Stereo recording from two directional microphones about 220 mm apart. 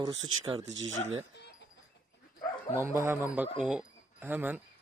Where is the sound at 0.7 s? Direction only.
60° right (ahead or behind).